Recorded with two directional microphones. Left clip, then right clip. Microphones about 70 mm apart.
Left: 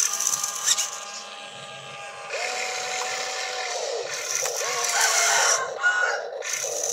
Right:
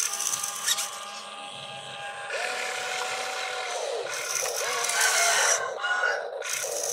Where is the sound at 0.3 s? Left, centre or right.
Left.